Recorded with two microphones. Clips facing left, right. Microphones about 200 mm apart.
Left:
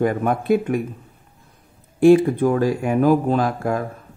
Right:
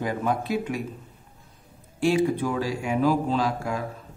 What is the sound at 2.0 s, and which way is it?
Speech, 55° left (ahead or behind).